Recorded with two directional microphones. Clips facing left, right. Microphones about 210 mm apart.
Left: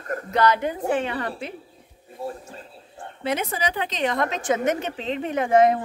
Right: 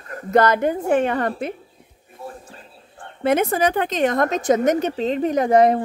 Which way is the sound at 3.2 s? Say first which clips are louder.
Right 8 dB; 50° right (ahead or behind).